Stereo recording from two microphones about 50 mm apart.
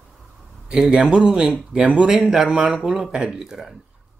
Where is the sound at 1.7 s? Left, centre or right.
Right.